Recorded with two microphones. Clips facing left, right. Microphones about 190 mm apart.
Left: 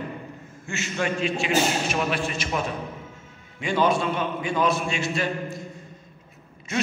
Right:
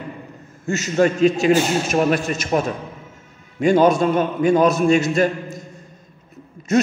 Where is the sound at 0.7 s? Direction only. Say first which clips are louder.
Right 10 dB; 40° right (ahead or behind).